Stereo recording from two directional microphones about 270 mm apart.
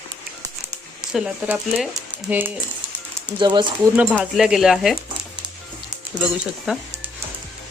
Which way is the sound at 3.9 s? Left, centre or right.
Centre.